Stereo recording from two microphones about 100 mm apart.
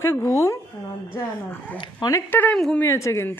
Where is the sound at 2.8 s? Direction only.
30° left (ahead or behind).